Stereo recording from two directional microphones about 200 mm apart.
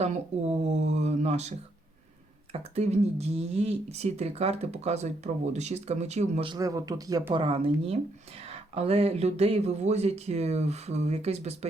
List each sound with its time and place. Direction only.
0.0 s speech: 35° right (ahead or behind)
6.5 s speech: 15° right (ahead or behind)
7.4 s speech: 30° right (ahead or behind)